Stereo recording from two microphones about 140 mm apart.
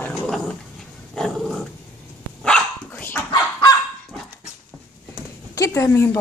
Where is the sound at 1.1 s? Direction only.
Centre (ahead or behind).